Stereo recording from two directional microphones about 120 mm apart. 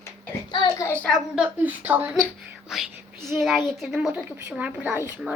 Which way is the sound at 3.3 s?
Centre (ahead or behind).